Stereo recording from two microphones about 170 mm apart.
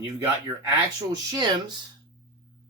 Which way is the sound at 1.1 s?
25° right (ahead or behind).